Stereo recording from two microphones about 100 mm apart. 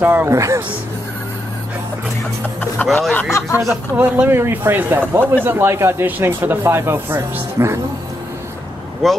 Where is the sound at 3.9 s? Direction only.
15° right (ahead or behind).